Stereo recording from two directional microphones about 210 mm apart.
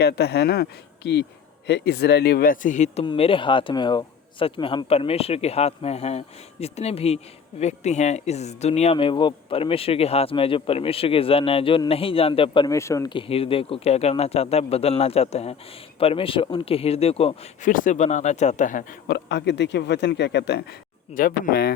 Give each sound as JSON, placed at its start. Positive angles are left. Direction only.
{"t": 0.0, "sound": "speech", "side_deg": 50}
{"t": 17.7, "sound": "speech", "side_deg": 40}
{"t": 19.0, "sound": "a man's voice", "side_deg": 55}
{"t": 21.1, "sound": "speech", "side_deg": 45}